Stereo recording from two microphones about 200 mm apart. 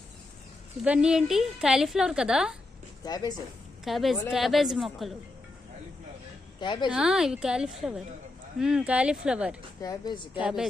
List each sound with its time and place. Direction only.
0.9 s a woman's voice: 5° right (ahead or behind)
3.0 s speech: 20° left (ahead or behind)
3.8 s a woman's voice: centre (ahead or behind)
6.6 s speech: 20° left (ahead or behind)
6.9 s a woman's voice: 5° right (ahead or behind)
9.8 s speech: 20° left (ahead or behind)
10.4 s a woman's voice: 5° right (ahead or behind)